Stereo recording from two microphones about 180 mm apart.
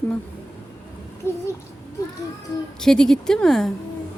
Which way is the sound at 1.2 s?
15° left (ahead or behind).